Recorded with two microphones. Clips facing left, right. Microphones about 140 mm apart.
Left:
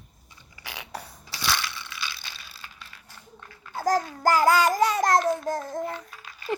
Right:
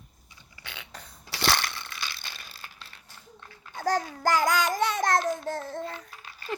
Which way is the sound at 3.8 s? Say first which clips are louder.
Left 3 dB; 35° left (ahead or behind).